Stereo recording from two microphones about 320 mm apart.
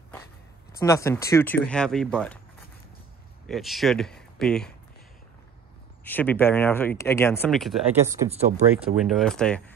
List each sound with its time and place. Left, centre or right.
0.7 s speech: centre
3.4 s speech: centre
6.0 s speech: centre